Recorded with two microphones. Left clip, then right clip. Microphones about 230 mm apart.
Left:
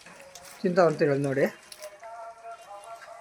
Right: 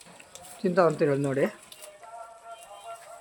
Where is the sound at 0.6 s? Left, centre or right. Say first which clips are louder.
Left 1 dB; centre.